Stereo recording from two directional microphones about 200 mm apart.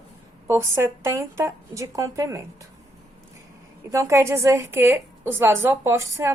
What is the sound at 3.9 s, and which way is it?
A woman's voice, 15° right (ahead or behind).